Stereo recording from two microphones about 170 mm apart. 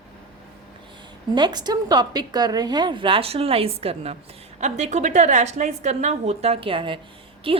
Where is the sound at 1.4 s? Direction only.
25° right (ahead or behind).